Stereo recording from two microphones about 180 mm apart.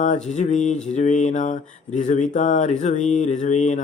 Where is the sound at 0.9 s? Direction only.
40° left (ahead or behind).